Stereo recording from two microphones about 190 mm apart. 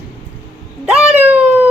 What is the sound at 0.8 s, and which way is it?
Speech, 5° right (ahead or behind).